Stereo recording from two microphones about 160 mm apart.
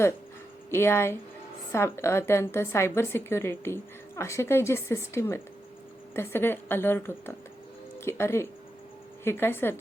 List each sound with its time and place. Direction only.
0.7 s a woman's voice: 15° left (ahead or behind)